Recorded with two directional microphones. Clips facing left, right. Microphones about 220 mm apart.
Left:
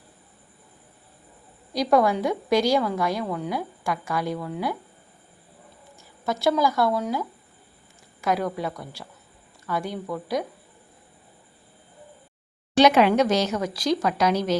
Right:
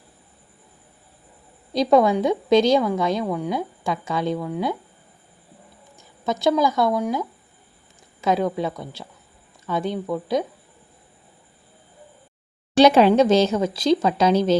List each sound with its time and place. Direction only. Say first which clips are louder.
1.7 s a woman's voice: right 4 dB; 25° right (ahead or behind)
6.0 s a woman's voice: right 3 dB; 20° right (ahead or behind)
12.7 s a woman's voice: right 3 dB; 30° right (ahead or behind)